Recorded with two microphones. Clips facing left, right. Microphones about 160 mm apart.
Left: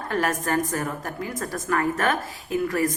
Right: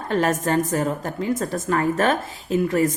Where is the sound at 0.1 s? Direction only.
25° right (ahead or behind).